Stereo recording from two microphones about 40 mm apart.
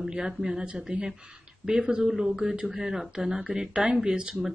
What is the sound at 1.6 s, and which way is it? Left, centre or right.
Speech, centre.